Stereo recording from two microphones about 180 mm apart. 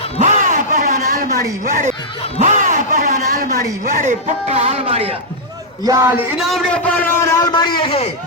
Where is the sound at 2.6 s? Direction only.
45° right (ahead or behind).